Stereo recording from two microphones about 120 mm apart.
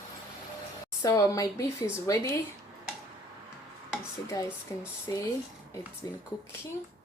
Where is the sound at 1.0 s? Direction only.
30° left (ahead or behind).